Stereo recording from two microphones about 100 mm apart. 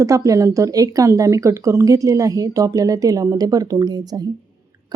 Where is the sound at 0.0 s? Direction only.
35° right (ahead or behind).